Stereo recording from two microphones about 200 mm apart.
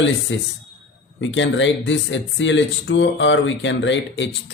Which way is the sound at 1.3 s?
70° left (ahead or behind).